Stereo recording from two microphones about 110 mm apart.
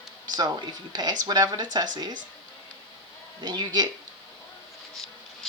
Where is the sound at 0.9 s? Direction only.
40° right (ahead or behind).